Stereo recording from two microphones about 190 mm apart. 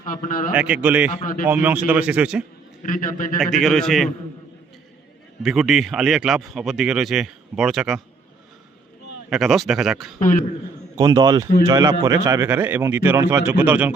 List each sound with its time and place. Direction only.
0.0 s a man's voice: 45° left (ahead or behind)
0.5 s speech: 5° right (ahead or behind)
1.1 s a man's voice: 45° left (ahead or behind)
1.5 s speech: 10° right (ahead or behind)
2.8 s a man's voice: 45° left (ahead or behind)
3.4 s speech: centre (ahead or behind)
5.4 s speech: centre (ahead or behind)
9.3 s speech: centre (ahead or behind)
10.2 s a man's voice: 45° left (ahead or behind)
10.9 s a man's voice: 20° right (ahead or behind)